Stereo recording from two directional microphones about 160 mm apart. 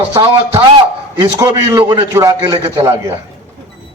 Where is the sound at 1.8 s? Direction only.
30° right (ahead or behind).